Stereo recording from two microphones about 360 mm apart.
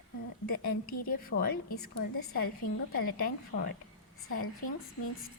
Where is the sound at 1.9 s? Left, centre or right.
Left.